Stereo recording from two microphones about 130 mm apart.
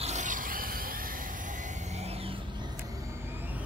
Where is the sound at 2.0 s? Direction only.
50° right (ahead or behind).